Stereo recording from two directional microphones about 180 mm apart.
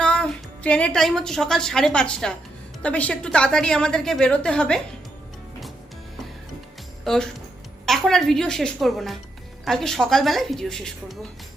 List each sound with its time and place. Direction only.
0.0 s a woman's voice: 5° left (ahead or behind)
7.0 s a woman's voice: centre (ahead or behind)